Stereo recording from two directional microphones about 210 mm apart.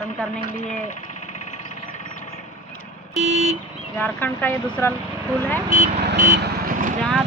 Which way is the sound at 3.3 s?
30° right (ahead or behind).